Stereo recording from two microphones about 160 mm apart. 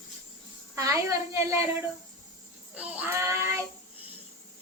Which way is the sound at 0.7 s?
20° right (ahead or behind).